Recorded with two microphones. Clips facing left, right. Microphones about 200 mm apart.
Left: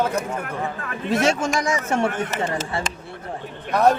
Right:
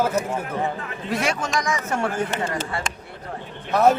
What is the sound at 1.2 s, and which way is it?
A man's voice, 25° left (ahead or behind).